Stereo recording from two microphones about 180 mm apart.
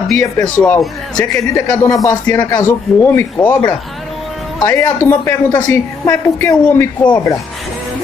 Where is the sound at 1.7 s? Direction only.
15° left (ahead or behind).